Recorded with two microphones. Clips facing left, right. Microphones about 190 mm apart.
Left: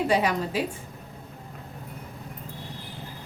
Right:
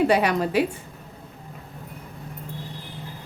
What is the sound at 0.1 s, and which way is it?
Speech, 65° right (ahead or behind).